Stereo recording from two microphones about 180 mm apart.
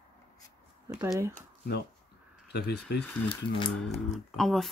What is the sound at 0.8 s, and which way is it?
Speech, 15° right (ahead or behind).